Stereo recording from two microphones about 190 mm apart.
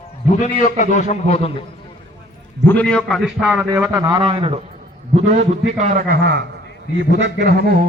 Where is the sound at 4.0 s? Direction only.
20° right (ahead or behind).